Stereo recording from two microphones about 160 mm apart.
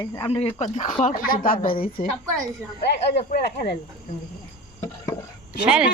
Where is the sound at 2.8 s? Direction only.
90° left.